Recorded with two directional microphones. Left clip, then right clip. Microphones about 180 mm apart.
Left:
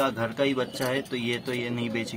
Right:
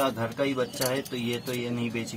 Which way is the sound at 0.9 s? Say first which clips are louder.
Left 1 dB; 15° left (ahead or behind).